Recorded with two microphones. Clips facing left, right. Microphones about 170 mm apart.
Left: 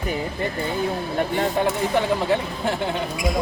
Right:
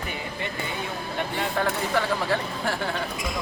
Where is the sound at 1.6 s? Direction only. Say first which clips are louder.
Left 2 dB; 20° left (ahead or behind).